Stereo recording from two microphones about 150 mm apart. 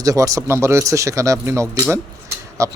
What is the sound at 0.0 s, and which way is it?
A man's voice, 20° right (ahead or behind).